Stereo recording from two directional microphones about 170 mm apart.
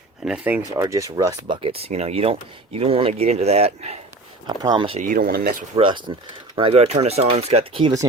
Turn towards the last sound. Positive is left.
turn(degrees=-30)  # may be behind; listen again after turning